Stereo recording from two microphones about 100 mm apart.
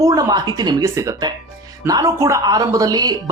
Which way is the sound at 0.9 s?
35° right (ahead or behind).